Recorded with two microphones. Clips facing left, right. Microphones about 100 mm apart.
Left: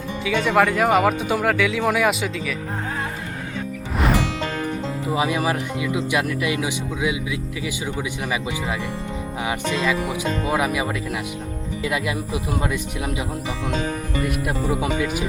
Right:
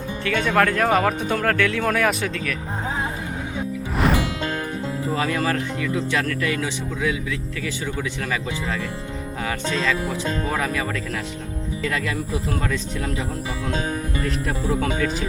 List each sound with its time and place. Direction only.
0.3 s speech: 5° left (ahead or behind)
5.0 s speech: 15° left (ahead or behind)
14.4 s speech: 15° left (ahead or behind)